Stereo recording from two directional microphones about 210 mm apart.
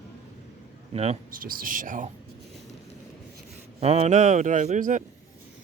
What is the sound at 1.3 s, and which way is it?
Speech, 40° right (ahead or behind).